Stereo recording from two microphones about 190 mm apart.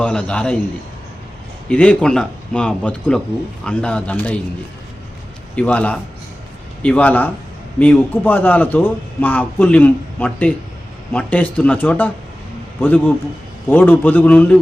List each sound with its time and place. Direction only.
0.0 s speech: 5° left (ahead or behind)
1.7 s a man's voice: 5° left (ahead or behind)
5.5 s a man's voice: 5° left (ahead or behind)